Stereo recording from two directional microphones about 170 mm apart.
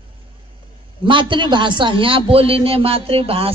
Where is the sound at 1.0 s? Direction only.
30° right (ahead or behind).